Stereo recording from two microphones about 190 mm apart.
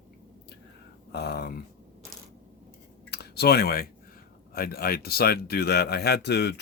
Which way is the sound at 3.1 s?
55° left (ahead or behind).